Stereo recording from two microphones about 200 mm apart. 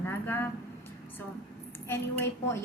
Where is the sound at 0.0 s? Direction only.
10° left (ahead or behind).